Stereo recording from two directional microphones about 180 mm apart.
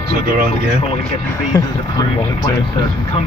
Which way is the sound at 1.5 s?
20° left (ahead or behind).